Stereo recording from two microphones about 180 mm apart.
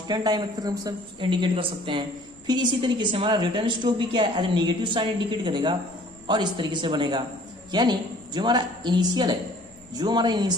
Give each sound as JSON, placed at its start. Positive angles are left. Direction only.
{"t": 0.1, "sound": "a woman's voice", "side_deg": -20}